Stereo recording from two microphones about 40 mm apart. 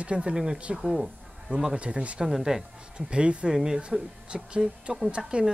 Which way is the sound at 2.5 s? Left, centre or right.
Centre.